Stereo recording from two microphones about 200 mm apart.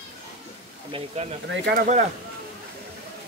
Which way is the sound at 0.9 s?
30° right (ahead or behind).